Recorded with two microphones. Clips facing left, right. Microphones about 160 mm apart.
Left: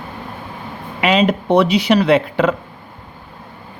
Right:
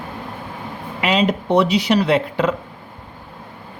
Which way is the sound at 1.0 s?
65° left (ahead or behind).